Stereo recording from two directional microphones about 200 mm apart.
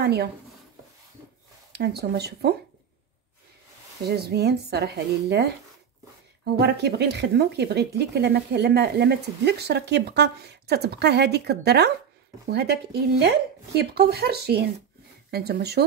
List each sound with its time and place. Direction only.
0.0 s speech: 55° right (ahead or behind)
1.7 s speech: 55° right (ahead or behind)
4.1 s speech: 55° right (ahead or behind)